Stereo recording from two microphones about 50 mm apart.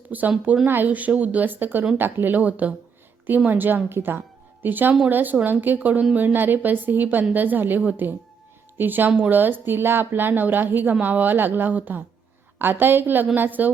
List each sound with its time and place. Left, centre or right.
0.1 s a woman's voice: right